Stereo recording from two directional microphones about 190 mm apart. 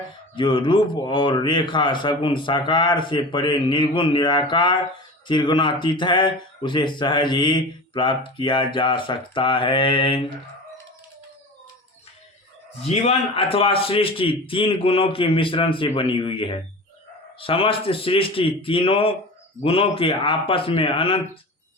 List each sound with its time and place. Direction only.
0.3 s speech: 25° left (ahead or behind)
12.8 s speech: 30° left (ahead or behind)